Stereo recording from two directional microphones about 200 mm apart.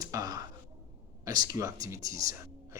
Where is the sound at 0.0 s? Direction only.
20° right (ahead or behind).